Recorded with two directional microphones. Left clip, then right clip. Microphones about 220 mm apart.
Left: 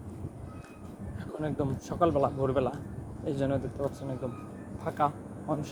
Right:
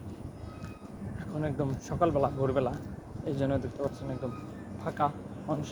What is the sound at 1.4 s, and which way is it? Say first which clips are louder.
A man's voice: even; 15° left (ahead or behind).